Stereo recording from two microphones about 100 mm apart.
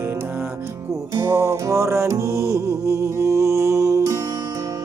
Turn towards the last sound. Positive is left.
turn(degrees=-30)  # may be behind; listen again after turning